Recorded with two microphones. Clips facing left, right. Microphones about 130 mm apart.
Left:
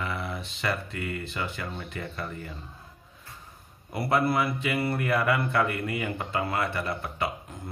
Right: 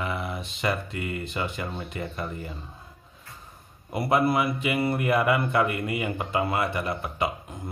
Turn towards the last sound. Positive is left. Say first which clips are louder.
# right 2 dB
turn(degrees=-15)  # may be behind; listen again after turning